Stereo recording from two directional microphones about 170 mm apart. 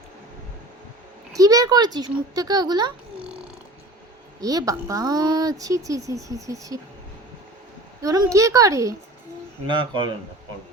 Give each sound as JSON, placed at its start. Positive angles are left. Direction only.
{"t": 1.3, "sound": "a woman's voice", "side_deg": -20}
{"t": 4.4, "sound": "a woman's voice", "side_deg": -20}
{"t": 8.0, "sound": "a woman's voice", "side_deg": -20}